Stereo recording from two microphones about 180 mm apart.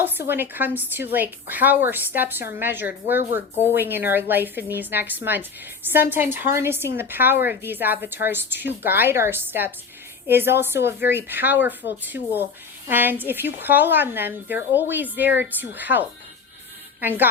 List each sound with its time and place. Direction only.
0.0 s speech: 10° right (ahead or behind)
12.1 s speech: 70° left (ahead or behind)
12.9 s a woman's voice: 10° right (ahead or behind)